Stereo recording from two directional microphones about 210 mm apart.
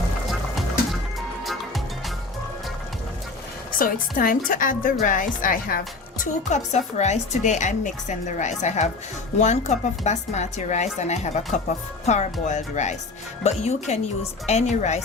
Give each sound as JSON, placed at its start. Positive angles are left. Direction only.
{"t": 0.3, "sound": "music", "side_deg": 0}
{"t": 3.8, "sound": "a woman's voice", "side_deg": 45}